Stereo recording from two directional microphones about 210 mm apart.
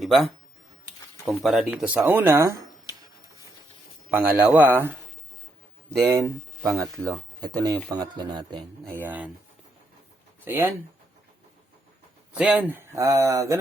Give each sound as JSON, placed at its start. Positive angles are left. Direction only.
{"t": 0.0, "sound": "speech", "side_deg": 0}
{"t": 4.1, "sound": "speech", "side_deg": -10}
{"t": 7.1, "sound": "speech", "side_deg": -20}
{"t": 8.9, "sound": "speech", "side_deg": -10}
{"t": 10.4, "sound": "speech", "side_deg": -10}
{"t": 12.3, "sound": "speech", "side_deg": -5}